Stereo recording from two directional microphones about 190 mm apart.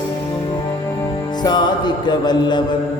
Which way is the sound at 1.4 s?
25° left (ahead or behind).